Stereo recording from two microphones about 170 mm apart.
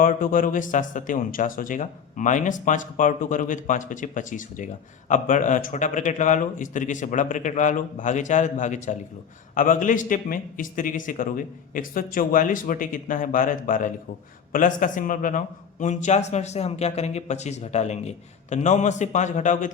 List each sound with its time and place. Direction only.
0.0 s speech: 55° left (ahead or behind)